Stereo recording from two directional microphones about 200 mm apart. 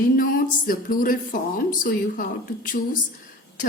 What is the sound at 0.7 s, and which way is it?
A woman's voice, 45° left (ahead or behind).